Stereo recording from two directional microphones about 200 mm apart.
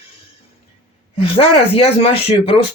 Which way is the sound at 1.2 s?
25° left (ahead or behind).